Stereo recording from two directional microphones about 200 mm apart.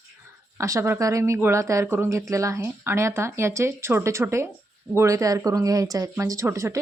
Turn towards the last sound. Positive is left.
turn(degrees=-15)  # may be behind; listen again after turning